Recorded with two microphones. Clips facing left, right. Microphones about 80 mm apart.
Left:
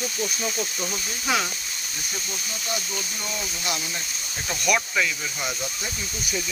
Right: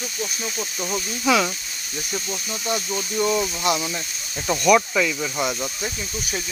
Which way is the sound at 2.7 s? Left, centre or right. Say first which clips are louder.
Right 6 dB; right.